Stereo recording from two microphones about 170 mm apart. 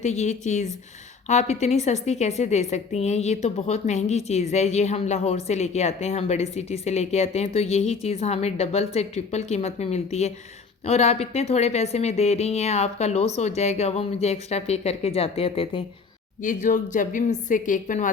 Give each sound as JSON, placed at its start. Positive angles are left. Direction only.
{"t": 0.0, "sound": "speech", "side_deg": 40}
{"t": 16.4, "sound": "speech", "side_deg": 50}